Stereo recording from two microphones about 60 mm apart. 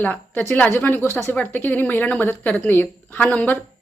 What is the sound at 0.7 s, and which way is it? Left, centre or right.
A woman's voice, left.